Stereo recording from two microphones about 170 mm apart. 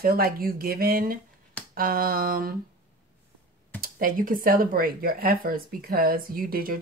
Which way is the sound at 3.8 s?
55° right (ahead or behind).